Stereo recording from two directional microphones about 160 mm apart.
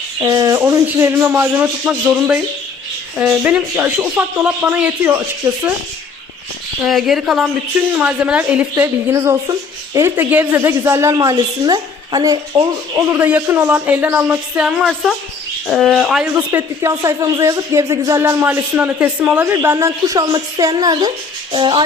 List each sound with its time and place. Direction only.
0.2 s speech: 20° right (ahead or behind)
6.8 s speech: centre (ahead or behind)
16.5 s speech: 15° right (ahead or behind)